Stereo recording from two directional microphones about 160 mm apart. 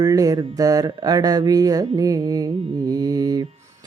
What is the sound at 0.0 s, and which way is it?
Mantra, 25° right (ahead or behind).